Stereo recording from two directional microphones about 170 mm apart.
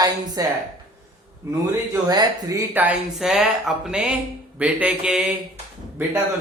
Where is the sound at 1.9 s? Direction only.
20° right (ahead or behind); by 5.3 s 5° right (ahead or behind).